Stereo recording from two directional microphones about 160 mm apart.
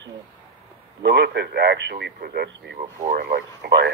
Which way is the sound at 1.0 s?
90° right.